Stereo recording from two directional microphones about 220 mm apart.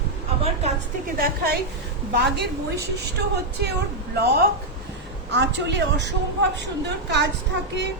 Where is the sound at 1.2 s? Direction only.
45° right (ahead or behind).